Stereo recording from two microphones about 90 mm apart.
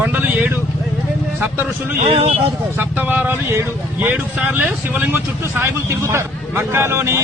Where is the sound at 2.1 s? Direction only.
90° right.